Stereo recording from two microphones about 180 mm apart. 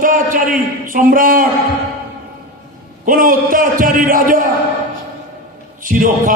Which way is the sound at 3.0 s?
50° right (ahead or behind).